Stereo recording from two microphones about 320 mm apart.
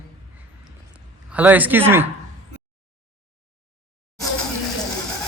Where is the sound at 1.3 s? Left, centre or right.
Centre.